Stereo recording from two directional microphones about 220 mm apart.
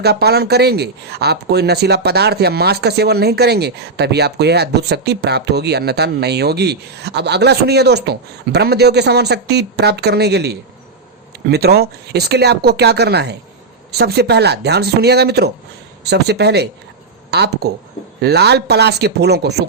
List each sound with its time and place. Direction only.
0.0 s speech: 45° right (ahead or behind)